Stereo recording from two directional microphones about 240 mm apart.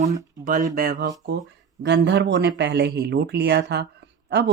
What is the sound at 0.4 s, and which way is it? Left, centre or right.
Speech, right.